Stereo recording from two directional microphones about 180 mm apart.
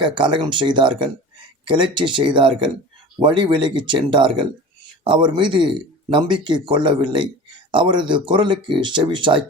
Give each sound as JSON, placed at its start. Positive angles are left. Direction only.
{"t": 0.0, "sound": "speech", "side_deg": -25}